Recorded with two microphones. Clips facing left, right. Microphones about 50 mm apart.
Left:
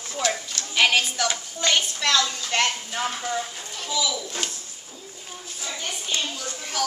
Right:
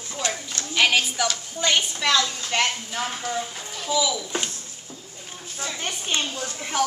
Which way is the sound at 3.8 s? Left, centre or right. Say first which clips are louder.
Right 3 dB; centre.